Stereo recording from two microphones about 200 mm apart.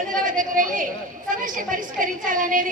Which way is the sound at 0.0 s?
40° right (ahead or behind).